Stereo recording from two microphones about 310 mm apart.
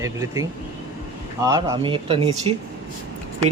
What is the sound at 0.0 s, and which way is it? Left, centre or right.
Speech, centre.